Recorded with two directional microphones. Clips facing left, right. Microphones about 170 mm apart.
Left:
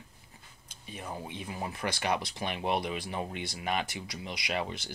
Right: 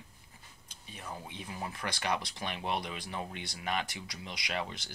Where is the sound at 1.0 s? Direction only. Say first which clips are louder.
Left 4 dB; 20° left (ahead or behind).